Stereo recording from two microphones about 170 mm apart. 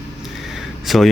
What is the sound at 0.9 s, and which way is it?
Speech, centre (ahead or behind).